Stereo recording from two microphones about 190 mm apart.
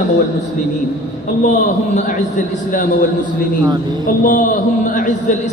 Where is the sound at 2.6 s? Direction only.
45° left (ahead or behind).